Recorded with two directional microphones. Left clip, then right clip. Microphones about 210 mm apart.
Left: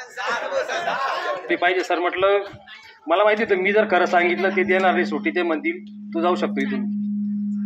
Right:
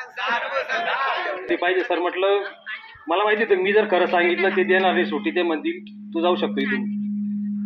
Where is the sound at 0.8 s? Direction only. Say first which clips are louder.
Right 1 dB; 30° left (ahead or behind).